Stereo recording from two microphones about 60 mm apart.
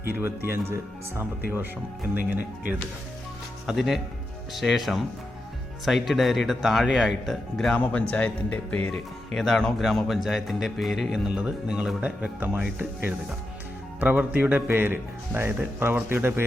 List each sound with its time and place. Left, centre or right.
0.2 s speech: right
2.1 s speech: right
3.7 s a man's voice: centre
8.1 s speech: left
8.9 s a man's voice: centre
11.3 s speech: centre; by 16.5 s right